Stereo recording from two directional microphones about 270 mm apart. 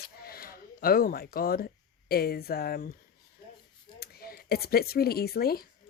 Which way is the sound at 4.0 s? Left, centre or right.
Left.